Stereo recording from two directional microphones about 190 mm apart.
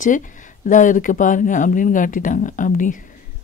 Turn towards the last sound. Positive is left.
turn(degrees=45)  # may be behind; listen again after turning